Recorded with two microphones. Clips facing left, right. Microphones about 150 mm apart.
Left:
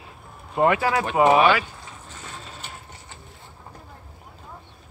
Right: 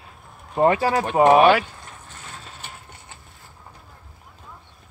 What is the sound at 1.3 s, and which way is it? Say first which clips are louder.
Speech: right 4 dB; 50° right (ahead or behind).